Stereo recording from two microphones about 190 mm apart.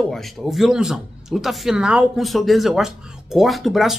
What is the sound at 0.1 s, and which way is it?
Speech, centre (ahead or behind).